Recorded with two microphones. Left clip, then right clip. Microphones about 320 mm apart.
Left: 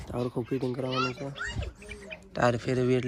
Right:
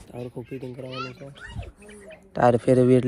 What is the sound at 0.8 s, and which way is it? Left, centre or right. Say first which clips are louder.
Speech: left 4 dB; left.